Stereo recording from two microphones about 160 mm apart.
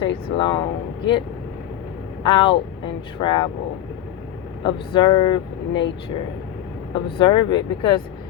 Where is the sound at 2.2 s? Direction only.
30° left (ahead or behind).